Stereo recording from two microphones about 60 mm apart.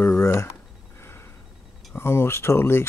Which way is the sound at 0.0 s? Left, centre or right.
Left.